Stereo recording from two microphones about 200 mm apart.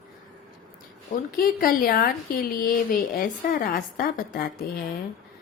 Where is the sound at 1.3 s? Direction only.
45° left (ahead or behind).